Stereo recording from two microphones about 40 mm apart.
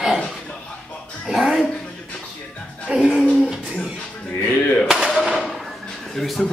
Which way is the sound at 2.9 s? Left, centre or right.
Right.